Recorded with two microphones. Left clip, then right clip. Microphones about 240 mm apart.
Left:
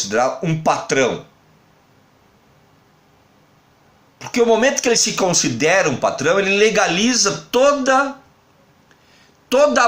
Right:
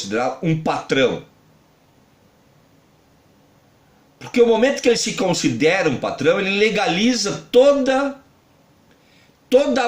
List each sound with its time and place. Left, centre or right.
0.1 s speech: left
4.4 s speech: left
9.5 s speech: left